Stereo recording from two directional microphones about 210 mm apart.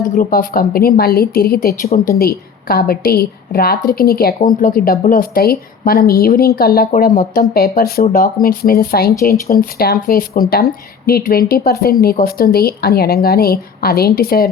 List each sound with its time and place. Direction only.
0.0 s a woman's voice: 40° left (ahead or behind)